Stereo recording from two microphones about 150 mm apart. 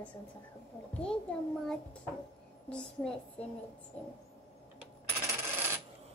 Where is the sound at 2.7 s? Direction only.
5° left (ahead or behind).